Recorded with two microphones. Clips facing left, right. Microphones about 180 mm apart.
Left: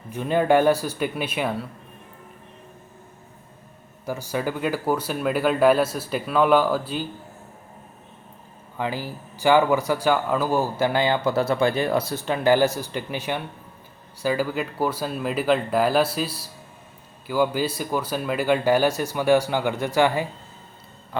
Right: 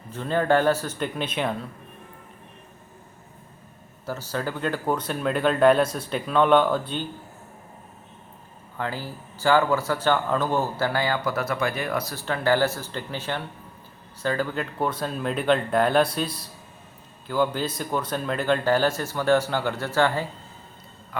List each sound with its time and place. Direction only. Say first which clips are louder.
0.1 s speech: left 3 dB; 15° left (ahead or behind)
4.0 s speech: left 3 dB; 15° left (ahead or behind)
8.8 s speech: left 3 dB; 15° left (ahead or behind)